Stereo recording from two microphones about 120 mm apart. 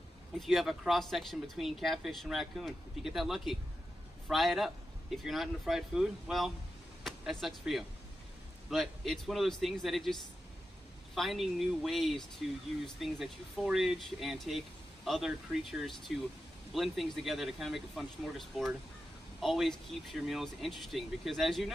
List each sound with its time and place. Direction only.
0.4 s speech: centre (ahead or behind)
11.1 s speech: centre (ahead or behind)
19.4 s speech: centre (ahead or behind)